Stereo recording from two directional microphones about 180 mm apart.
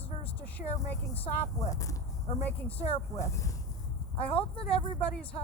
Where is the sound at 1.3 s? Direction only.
20° left (ahead or behind).